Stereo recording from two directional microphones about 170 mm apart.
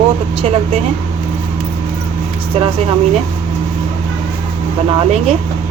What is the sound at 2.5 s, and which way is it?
Speech, 35° right (ahead or behind).